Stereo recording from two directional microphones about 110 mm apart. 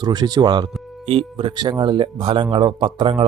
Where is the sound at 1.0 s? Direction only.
60° right (ahead or behind).